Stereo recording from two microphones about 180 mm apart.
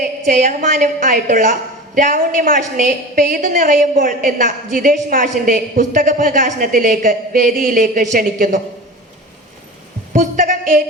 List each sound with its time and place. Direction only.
0.3 s a woman's voice: 45° right (ahead or behind)
10.1 s speech: 45° right (ahead or behind)